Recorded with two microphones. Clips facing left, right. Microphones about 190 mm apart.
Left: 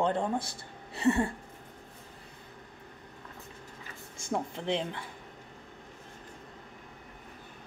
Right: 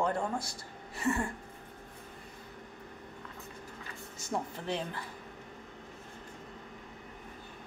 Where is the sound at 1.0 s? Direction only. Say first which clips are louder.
Left 5 dB; 30° left (ahead or behind).